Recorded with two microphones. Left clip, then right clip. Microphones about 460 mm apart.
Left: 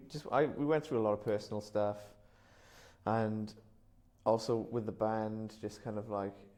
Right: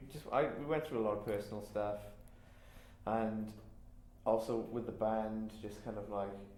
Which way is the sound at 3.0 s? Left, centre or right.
Left.